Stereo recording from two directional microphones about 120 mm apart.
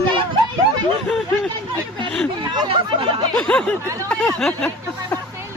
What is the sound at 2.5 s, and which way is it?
Speech, 45° right (ahead or behind).